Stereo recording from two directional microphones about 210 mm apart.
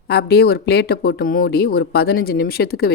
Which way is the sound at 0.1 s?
50° left (ahead or behind).